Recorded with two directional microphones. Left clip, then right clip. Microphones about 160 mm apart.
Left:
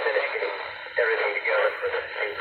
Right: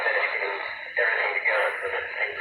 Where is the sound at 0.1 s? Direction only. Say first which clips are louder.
Right 1 dB; 20° left (ahead or behind).